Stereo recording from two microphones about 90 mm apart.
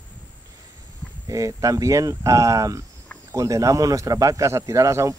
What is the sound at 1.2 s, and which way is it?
Speech, 40° right (ahead or behind).